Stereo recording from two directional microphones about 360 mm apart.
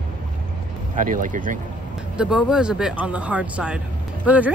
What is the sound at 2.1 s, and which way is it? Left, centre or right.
Speech, centre.